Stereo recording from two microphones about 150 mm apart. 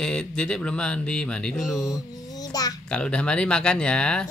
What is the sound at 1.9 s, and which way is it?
Music, 25° left (ahead or behind).